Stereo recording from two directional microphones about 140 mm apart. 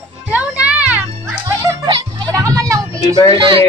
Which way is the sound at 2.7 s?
20° right (ahead or behind).